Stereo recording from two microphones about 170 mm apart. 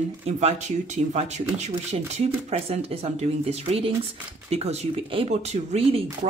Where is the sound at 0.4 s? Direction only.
40° right (ahead or behind).